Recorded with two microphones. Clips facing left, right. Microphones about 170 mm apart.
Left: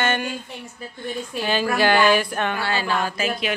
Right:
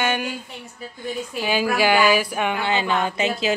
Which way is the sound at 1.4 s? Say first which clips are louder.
Even; 10° right (ahead or behind).